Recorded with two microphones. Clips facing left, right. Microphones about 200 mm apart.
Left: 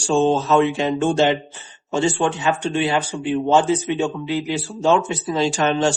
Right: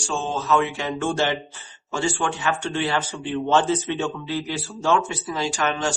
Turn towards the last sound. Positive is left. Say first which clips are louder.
# left 6 dB
turn(degrees=25)  # may be behind; listen again after turning